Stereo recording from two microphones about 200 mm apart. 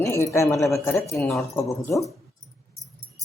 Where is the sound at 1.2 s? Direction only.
Centre (ahead or behind).